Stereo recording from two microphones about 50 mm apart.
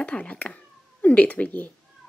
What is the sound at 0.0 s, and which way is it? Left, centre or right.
Speech, left.